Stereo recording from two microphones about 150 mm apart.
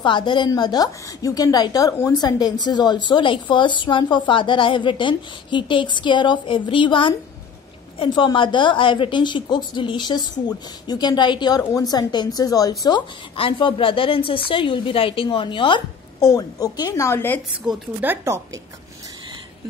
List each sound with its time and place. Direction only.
0.0 s a woman's voice: 30° left (ahead or behind)
17.6 s speech: 15° right (ahead or behind)